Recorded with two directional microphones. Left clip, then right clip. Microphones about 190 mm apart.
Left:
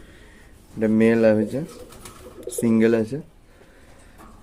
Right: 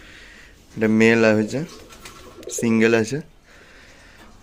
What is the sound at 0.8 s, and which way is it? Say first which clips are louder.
Speech: right 2 dB; 10° right (ahead or behind).